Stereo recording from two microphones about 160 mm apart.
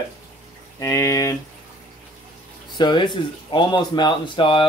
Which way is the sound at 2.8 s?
30° left (ahead or behind).